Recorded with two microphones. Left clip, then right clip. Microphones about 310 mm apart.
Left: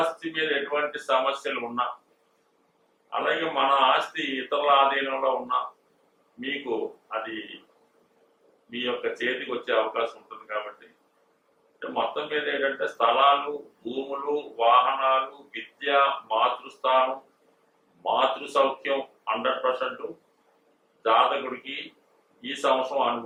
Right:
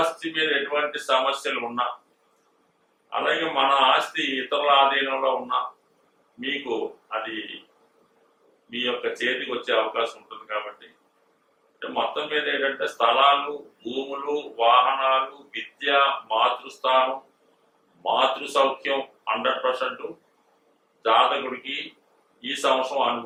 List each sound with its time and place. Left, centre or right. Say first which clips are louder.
0.0 s speech: right 3 dB; centre
3.2 s speech: right 2 dB; centre
8.7 s speech: right 2 dB; centre
13.6 s speech: right 2 dB; left
14.1 s speech: left 1 dB; centre